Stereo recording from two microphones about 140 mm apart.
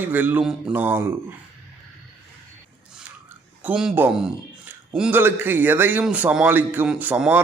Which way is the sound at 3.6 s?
10° right (ahead or behind).